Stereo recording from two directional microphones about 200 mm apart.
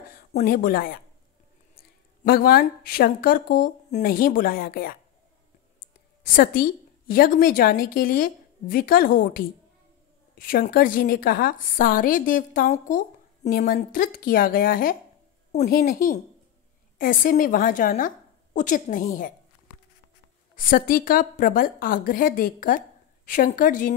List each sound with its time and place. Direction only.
0.3 s a woman's voice: 40° left (ahead or behind)
20.5 s a woman's voice: 45° left (ahead or behind)